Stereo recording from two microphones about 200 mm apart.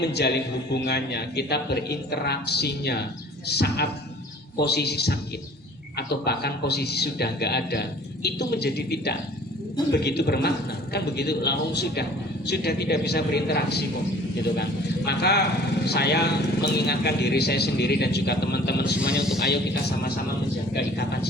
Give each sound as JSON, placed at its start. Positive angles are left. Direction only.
{"t": 0.0, "sound": "a man's voice", "side_deg": 55}
{"t": 18.9, "sound": "speech", "side_deg": -5}